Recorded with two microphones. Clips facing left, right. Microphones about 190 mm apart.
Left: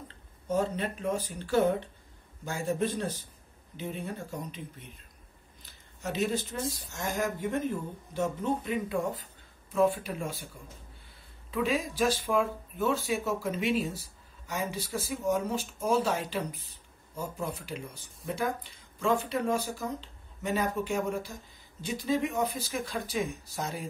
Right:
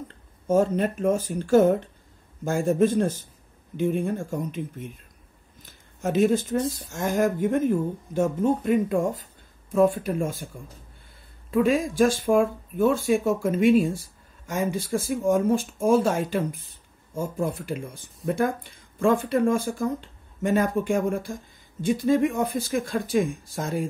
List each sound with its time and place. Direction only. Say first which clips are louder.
0.5 s speech: right 8 dB; 45° right (ahead or behind)
11.5 s speech: right 9 dB; 50° right (ahead or behind)